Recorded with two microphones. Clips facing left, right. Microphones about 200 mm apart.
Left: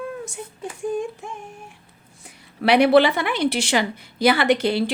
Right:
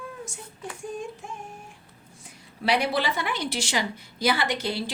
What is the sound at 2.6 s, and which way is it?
A woman's voice, 65° left (ahead or behind).